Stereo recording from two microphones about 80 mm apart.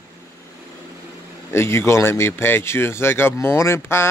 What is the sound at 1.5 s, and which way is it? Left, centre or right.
Speech, left.